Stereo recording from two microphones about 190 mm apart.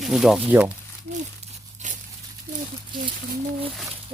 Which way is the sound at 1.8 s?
40° right (ahead or behind).